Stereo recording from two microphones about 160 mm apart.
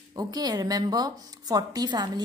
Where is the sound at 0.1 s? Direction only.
25° right (ahead or behind).